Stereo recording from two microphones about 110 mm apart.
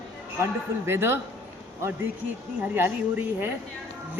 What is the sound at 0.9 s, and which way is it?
Speech, 20° right (ahead or behind).